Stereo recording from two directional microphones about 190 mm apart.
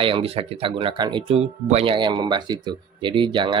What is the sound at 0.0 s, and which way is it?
Speech, 30° right (ahead or behind).